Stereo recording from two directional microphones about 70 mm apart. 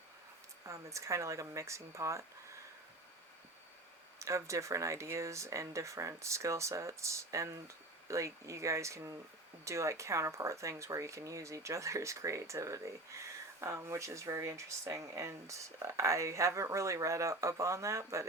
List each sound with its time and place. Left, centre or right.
0.6 s speech: right
4.2 s speech: right